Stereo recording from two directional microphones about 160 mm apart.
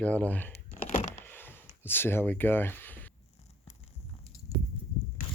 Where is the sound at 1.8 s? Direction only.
15° left (ahead or behind).